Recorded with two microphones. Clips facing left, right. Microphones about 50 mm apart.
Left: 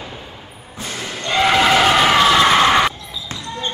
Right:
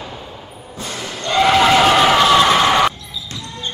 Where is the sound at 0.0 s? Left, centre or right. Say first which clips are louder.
Right 2 dB; centre.